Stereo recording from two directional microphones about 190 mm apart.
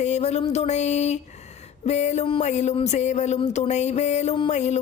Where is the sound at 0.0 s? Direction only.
35° left (ahead or behind).